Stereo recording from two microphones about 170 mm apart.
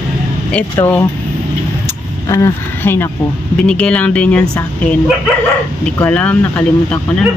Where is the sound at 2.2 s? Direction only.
20° left (ahead or behind).